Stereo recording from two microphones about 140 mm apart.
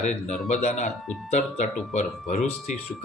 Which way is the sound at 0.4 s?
55° left (ahead or behind).